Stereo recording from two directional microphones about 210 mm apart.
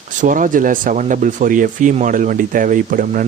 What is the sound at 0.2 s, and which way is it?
Speech, 40° right (ahead or behind).